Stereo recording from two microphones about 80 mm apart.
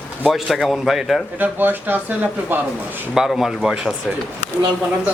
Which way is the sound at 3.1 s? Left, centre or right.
Centre.